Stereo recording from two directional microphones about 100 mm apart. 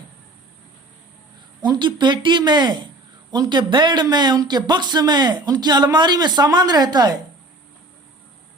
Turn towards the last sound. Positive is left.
turn(degrees=-40)  # may be behind; listen again after turning